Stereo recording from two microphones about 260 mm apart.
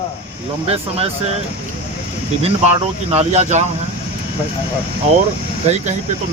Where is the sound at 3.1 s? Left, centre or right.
Right.